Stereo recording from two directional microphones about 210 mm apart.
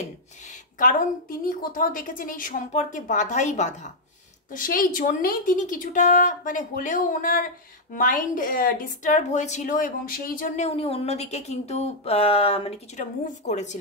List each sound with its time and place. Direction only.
0.7 s a woman's voice: 40° left (ahead or behind)